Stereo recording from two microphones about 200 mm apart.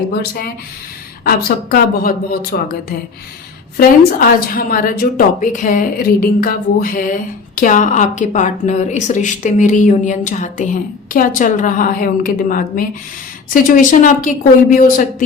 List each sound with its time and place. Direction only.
0.1 s speech: 50° left (ahead or behind)
3.8 s a woman's voice: 45° left (ahead or behind)